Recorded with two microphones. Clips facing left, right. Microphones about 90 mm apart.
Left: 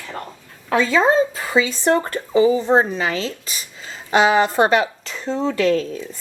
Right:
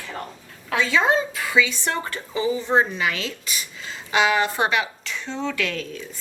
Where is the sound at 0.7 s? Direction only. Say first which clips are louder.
Left 4 dB; 40° left (ahead or behind).